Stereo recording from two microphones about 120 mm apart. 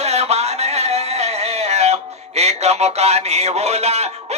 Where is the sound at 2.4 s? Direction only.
65° right (ahead or behind).